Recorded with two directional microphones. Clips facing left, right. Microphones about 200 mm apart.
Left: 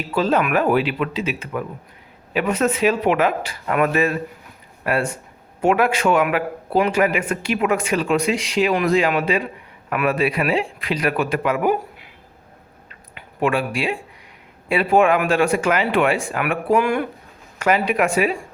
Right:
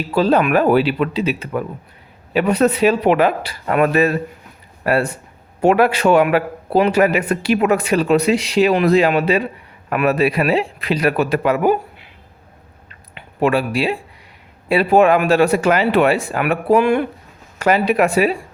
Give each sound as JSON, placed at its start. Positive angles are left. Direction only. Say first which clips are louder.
{"t": 0.1, "sound": "a man's voice", "louder": "right 4 dB", "side_deg": -35}
{"t": 13.1, "sound": "a man's voice", "louder": "right 4 dB", "side_deg": -35}